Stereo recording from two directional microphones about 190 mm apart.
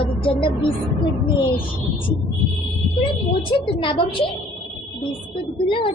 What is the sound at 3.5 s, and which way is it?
Speech, 25° left (ahead or behind).